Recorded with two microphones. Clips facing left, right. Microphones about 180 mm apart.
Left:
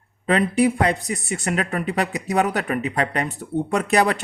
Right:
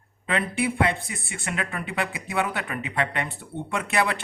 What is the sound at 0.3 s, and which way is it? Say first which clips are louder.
Speech: left 8 dB; 40° left (ahead or behind).